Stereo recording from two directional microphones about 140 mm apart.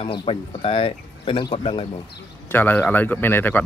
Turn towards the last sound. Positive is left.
turn(degrees=15)  # may be behind; listen again after turning